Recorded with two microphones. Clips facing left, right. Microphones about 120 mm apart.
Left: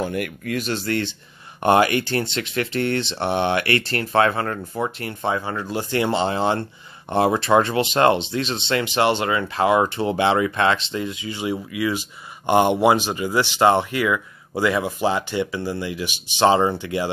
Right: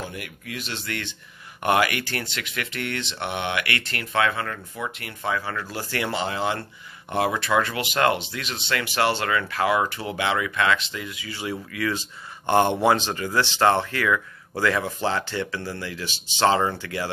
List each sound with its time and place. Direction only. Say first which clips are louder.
0.0 s speech: left 10 dB; 55° left (ahead or behind); by 17.1 s 20° left (ahead or behind)